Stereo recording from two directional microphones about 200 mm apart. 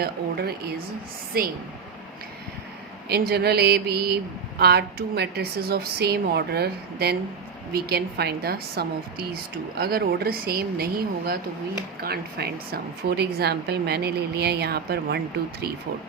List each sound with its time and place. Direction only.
0.0 s speech: 50° right (ahead or behind)
3.1 s speech: 55° right (ahead or behind)
12.0 s speech: 50° right (ahead or behind)